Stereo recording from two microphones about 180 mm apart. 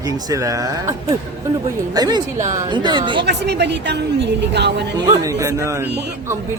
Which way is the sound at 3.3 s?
70° right (ahead or behind).